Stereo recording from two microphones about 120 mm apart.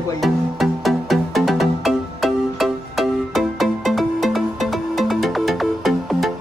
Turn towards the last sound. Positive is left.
turn(degrees=0)  # may be behind; listen again after turning